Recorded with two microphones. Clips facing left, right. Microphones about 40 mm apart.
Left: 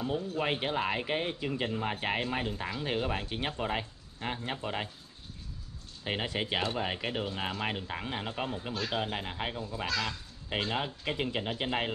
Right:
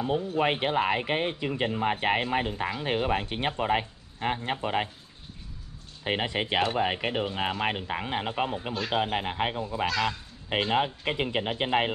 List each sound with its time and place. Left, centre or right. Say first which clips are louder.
0.0 s speech: right 6 dB; right
6.0 s speech: right 5 dB; right